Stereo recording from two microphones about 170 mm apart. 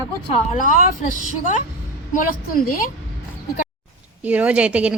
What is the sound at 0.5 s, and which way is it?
Speech, 50° left (ahead or behind).